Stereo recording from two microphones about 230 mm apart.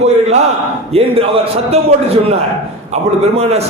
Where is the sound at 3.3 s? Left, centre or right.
Right.